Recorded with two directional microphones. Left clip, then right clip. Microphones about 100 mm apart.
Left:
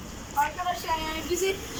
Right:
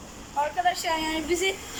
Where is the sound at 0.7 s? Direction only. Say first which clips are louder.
Right 5 dB; 15° right (ahead or behind).